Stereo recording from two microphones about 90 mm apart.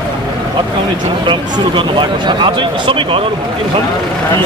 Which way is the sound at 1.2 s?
60° right (ahead or behind).